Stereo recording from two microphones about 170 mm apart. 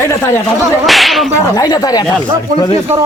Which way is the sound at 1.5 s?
20° left (ahead or behind).